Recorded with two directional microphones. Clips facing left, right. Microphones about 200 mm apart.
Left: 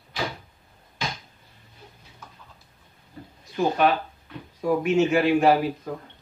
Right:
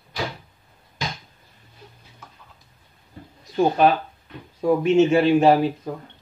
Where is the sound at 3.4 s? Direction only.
35° right (ahead or behind).